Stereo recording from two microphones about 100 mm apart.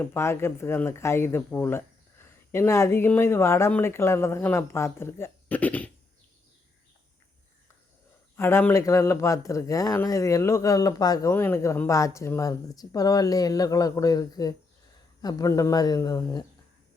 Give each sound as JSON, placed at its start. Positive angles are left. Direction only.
{"t": 0.0, "sound": "speech", "side_deg": 25}
{"t": 8.4, "sound": "speech", "side_deg": 25}
{"t": 11.3, "sound": "speech", "side_deg": 25}